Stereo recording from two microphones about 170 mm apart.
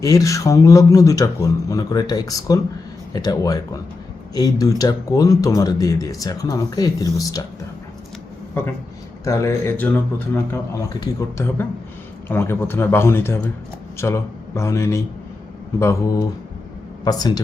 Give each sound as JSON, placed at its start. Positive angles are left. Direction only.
{"t": 0.0, "sound": "speech", "side_deg": 20}
{"t": 9.2, "sound": "a man's voice", "side_deg": 20}